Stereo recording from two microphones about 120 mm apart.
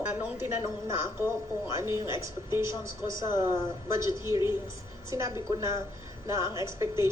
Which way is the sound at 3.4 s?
25° right (ahead or behind).